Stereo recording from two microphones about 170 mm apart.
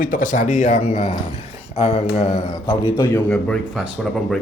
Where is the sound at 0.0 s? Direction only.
55° left (ahead or behind).